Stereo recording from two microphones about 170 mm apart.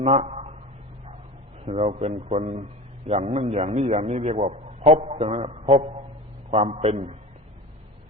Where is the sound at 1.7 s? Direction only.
35° right (ahead or behind).